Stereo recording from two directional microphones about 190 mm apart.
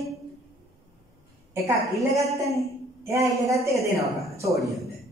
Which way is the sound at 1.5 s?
15° right (ahead or behind).